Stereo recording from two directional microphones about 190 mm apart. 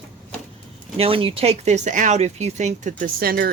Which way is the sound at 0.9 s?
30° right (ahead or behind).